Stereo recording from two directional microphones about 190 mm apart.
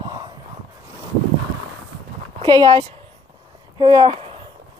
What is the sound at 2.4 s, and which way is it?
Speech, 20° right (ahead or behind).